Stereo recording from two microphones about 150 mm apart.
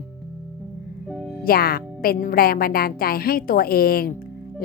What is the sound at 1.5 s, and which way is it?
Speech, 80° left.